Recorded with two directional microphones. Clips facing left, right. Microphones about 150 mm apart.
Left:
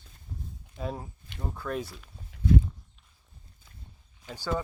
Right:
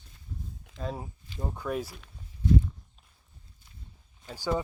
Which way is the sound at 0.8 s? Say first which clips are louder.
Left 1 dB; 90° right.